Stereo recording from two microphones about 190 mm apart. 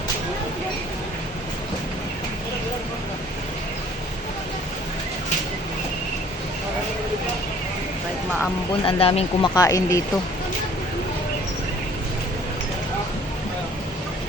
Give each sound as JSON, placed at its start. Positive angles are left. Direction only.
{"t": 8.8, "sound": "speech", "side_deg": 30}
{"t": 9.6, "sound": "speech", "side_deg": 15}